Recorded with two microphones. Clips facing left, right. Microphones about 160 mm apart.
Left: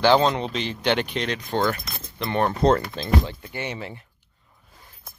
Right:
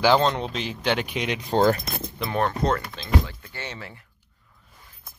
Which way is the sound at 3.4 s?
15° left (ahead or behind).